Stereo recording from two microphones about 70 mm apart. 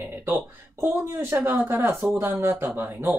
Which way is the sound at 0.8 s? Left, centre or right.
Right.